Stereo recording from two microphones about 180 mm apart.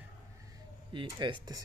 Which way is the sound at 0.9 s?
25° right (ahead or behind).